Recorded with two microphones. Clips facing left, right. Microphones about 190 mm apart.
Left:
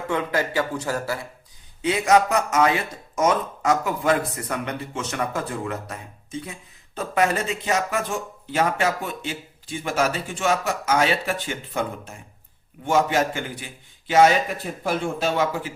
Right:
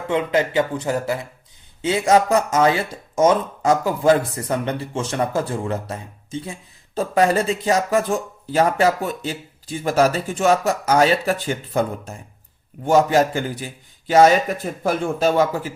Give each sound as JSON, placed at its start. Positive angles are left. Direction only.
{"t": 0.1, "sound": "a man's voice", "side_deg": -20}